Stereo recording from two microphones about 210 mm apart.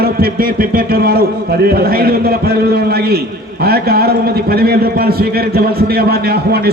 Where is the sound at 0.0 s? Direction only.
45° right (ahead or behind).